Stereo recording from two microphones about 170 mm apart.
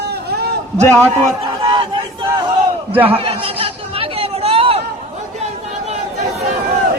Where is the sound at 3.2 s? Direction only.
35° right (ahead or behind).